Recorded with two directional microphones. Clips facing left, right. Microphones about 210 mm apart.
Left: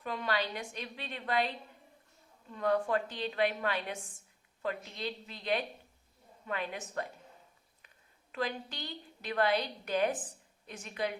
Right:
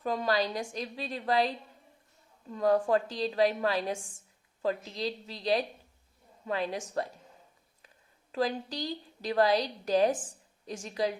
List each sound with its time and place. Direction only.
0.0 s a woman's voice: 40° right (ahead or behind)
8.3 s a woman's voice: 35° right (ahead or behind)